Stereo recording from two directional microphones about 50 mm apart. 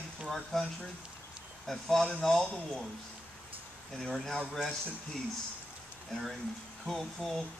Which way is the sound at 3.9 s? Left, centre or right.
Centre.